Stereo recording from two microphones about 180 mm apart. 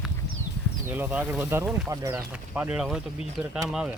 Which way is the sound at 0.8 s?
10° right (ahead or behind).